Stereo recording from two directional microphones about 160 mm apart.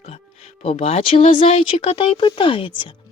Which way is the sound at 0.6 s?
40° left (ahead or behind).